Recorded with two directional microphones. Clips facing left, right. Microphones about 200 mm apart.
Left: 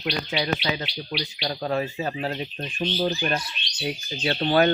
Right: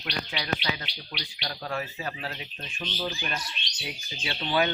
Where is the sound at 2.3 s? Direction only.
40° left (ahead or behind).